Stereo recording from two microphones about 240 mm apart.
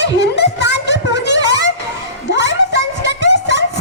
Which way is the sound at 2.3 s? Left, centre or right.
Left.